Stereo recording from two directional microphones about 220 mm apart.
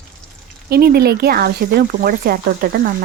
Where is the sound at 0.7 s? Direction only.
45° right (ahead or behind).